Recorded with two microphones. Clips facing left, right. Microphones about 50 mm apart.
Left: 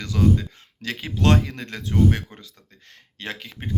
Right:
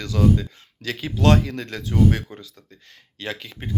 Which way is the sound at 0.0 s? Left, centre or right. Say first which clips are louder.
Right 1 dB; left.